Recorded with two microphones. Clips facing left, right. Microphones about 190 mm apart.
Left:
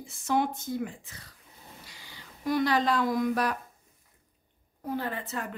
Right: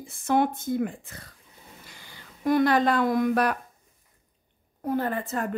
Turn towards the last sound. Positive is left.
turn(degrees=-50)  # may be behind; listen again after turning